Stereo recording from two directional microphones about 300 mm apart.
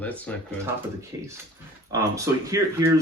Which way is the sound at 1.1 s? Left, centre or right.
Centre.